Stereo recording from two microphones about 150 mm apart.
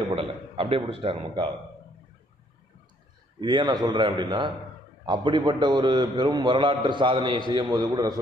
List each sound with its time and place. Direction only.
0.1 s a man's voice: 35° right (ahead or behind)
3.3 s a man's voice: 30° right (ahead or behind)